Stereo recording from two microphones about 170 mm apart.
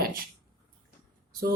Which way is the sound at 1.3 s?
60° right (ahead or behind).